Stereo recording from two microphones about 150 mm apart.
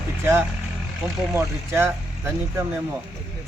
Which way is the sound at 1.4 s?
15° right (ahead or behind).